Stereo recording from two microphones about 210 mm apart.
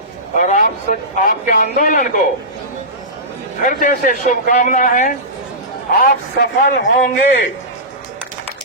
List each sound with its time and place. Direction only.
0.3 s a man's voice: 40° left (ahead or behind)
3.7 s a man's voice: 40° left (ahead or behind); by 7.4 s 60° left (ahead or behind)